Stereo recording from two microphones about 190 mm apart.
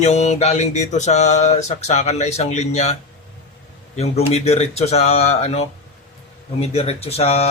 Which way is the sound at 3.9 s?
35° left (ahead or behind).